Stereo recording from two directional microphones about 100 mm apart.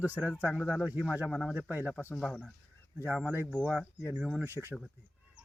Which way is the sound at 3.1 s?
20° right (ahead or behind).